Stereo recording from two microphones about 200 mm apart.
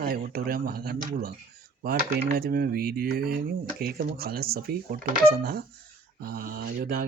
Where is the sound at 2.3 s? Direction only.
50° right (ahead or behind).